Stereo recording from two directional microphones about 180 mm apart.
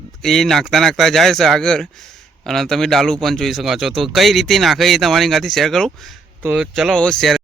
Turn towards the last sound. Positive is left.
turn(degrees=5)  # may be behind; listen again after turning